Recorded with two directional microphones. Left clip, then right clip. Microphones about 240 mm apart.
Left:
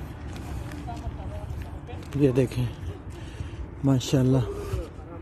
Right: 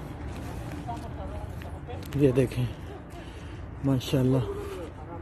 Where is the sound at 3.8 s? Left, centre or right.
Centre.